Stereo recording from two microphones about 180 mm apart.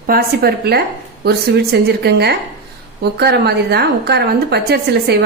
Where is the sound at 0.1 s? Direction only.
60° right (ahead or behind).